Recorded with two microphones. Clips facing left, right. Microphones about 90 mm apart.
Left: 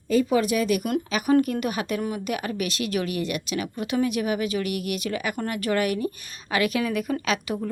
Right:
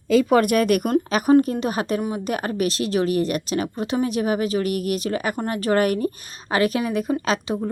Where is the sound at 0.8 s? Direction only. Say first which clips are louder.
Right 5 dB; 40° right (ahead or behind).